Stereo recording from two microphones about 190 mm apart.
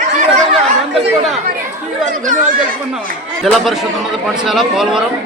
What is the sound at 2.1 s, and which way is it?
Speech, 45° right (ahead or behind).